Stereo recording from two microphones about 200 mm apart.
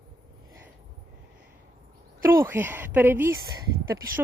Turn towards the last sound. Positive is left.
turn(degrees=-10)  # may be behind; listen again after turning